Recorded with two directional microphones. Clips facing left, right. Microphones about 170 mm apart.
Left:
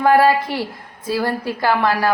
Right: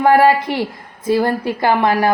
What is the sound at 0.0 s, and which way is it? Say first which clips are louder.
Speech: right 2 dB; 20° right (ahead or behind).